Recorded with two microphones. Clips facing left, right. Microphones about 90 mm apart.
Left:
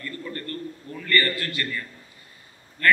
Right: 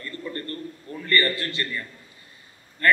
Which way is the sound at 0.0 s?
30° right (ahead or behind).